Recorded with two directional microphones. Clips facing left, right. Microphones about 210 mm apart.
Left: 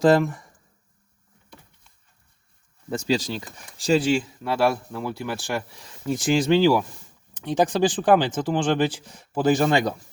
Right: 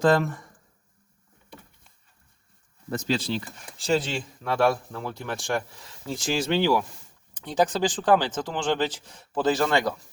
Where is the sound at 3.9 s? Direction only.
10° left (ahead or behind).